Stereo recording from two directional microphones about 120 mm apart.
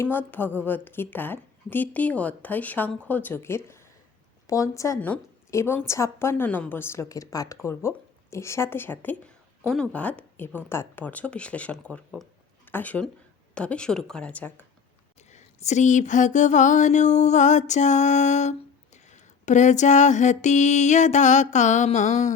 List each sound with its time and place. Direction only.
0.0 s a woman's voice: 15° left (ahead or behind)
4.9 s a woman's voice: 10° left (ahead or behind)
15.3 s a sound: 75° left (ahead or behind)
21.8 s music: 75° left (ahead or behind)